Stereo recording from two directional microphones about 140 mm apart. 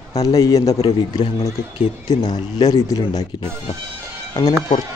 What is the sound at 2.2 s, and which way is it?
Speech, 30° left (ahead or behind).